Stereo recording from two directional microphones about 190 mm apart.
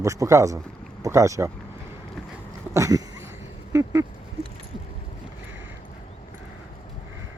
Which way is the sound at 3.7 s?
15° right (ahead or behind).